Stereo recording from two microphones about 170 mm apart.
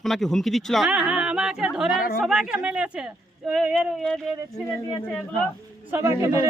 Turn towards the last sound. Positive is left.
turn(degrees=-20)  # may be behind; listen again after turning